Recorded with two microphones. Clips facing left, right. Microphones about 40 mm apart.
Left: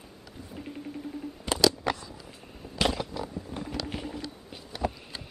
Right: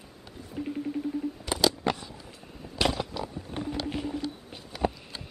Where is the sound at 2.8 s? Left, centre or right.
Right.